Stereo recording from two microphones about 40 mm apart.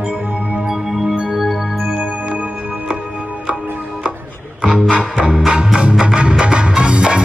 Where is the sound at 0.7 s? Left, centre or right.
Right.